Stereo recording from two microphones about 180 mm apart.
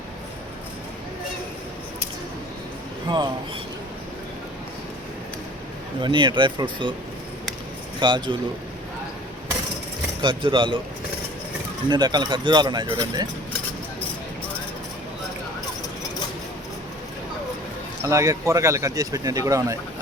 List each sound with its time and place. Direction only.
3.1 s speech: 25° right (ahead or behind)
6.0 s speech: 25° right (ahead or behind)
7.9 s speech: 25° right (ahead or behind)
10.2 s speech: 25° right (ahead or behind)
11.9 s speech: 25° right (ahead or behind)
18.0 s speech: 15° right (ahead or behind)